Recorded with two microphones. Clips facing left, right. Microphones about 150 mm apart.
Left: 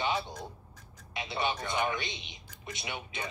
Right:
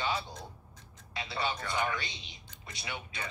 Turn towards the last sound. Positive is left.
turn(degrees=20)  # may be behind; listen again after turning